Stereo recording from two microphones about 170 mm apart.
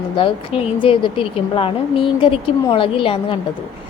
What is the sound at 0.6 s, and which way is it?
A woman's voice, 30° left (ahead or behind).